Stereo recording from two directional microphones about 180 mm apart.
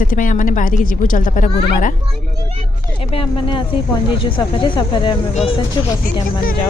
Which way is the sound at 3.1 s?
30° left (ahead or behind).